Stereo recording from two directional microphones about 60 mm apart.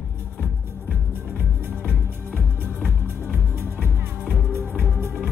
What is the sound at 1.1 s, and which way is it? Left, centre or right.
Music, right.